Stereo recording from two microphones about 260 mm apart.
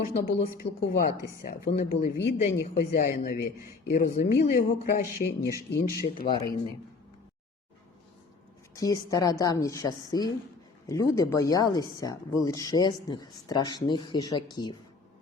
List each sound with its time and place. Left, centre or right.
0.0 s speech: left
6.1 s a woman's voice: centre
8.7 s a woman's voice: centre